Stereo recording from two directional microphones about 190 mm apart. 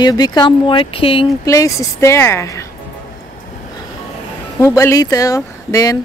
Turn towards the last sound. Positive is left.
turn(degrees=20)  # may be behind; listen again after turning